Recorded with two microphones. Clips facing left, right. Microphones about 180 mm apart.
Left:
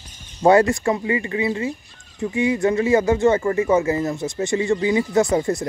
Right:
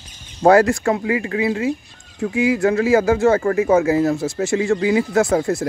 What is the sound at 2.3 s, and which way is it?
Speech, 5° right (ahead or behind).